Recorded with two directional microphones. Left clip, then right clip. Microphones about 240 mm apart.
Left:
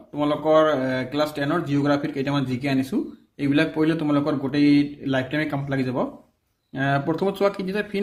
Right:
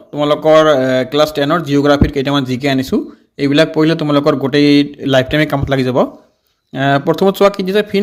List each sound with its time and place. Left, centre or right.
0.2 s speech: right